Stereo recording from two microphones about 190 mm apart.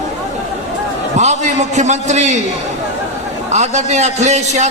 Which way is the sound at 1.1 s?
35° right (ahead or behind).